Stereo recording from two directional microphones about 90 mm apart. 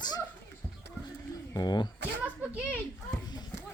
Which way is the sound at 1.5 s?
50° left (ahead or behind).